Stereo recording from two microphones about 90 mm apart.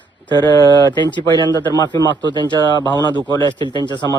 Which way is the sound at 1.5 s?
50° left (ahead or behind).